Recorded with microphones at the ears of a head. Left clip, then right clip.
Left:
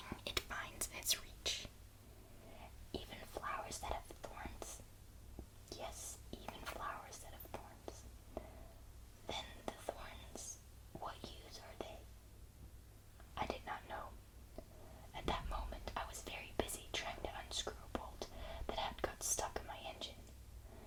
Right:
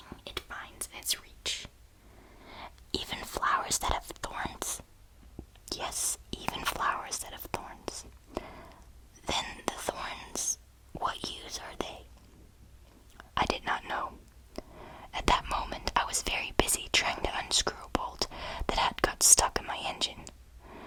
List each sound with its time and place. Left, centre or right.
0.9 s whispering: right
13.1 s whispering: right